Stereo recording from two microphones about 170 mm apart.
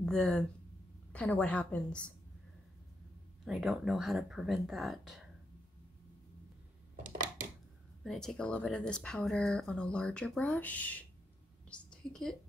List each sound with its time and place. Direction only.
0.0 s a woman's voice: 5° left (ahead or behind)
3.4 s speech: centre (ahead or behind)
7.0 s a sound: 50° right (ahead or behind)
8.0 s a woman's voice: centre (ahead or behind)